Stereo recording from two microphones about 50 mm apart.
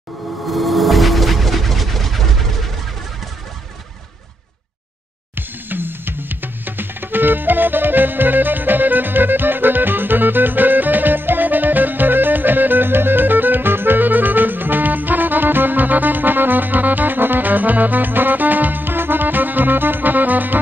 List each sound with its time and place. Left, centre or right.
0.7 s music: centre
5.3 s drum: right